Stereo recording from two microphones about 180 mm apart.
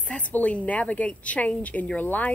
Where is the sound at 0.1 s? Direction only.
10° left (ahead or behind).